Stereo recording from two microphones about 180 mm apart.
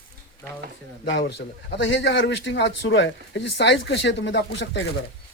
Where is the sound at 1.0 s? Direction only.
80° left.